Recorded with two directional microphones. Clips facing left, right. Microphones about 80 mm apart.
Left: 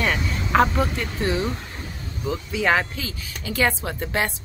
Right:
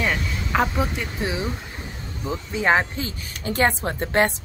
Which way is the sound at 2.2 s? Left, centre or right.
Right.